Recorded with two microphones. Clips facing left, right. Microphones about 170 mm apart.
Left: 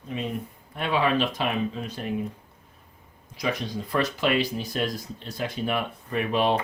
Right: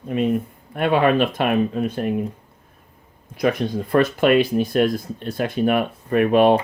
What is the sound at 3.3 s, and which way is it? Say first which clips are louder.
Speech: right 8 dB; 55° right (ahead or behind).